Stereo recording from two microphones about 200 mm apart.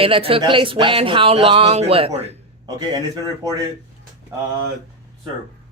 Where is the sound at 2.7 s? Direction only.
20° right (ahead or behind).